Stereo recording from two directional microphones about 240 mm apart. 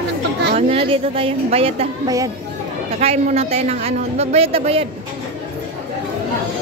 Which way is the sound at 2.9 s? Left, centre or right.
Right.